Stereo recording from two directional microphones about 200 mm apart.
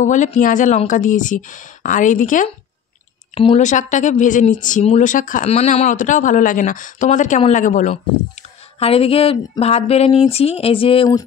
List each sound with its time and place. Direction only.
0.0 s speech: 35° left (ahead or behind)